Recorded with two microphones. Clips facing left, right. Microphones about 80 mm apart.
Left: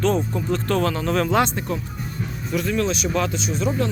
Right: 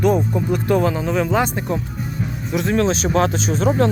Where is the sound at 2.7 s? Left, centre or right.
Right.